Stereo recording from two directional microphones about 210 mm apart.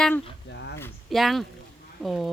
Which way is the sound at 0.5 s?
55° left (ahead or behind).